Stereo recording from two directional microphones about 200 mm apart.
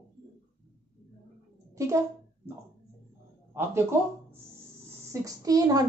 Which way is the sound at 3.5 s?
15° right (ahead or behind).